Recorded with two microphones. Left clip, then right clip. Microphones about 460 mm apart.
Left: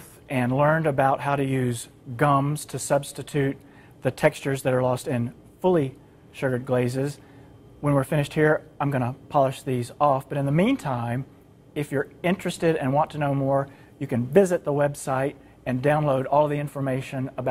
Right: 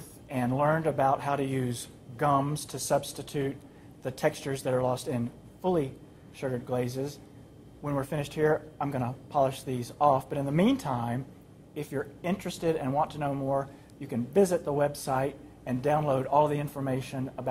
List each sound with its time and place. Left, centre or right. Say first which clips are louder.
0.3 s speech: left 5 dB; left